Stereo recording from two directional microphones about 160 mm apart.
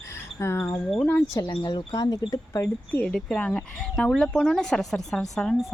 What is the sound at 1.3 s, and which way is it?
Speech, 25° left (ahead or behind).